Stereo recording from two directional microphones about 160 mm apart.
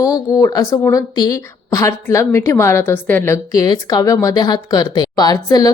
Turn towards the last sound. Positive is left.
turn(degrees=25)  # may be behind; listen again after turning